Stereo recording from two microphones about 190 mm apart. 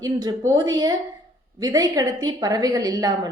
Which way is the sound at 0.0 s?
20° right (ahead or behind).